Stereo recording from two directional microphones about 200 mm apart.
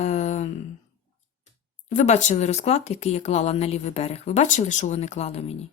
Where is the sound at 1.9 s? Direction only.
35° left (ahead or behind).